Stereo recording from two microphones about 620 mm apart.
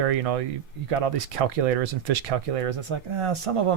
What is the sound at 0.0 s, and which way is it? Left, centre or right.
Speech, right.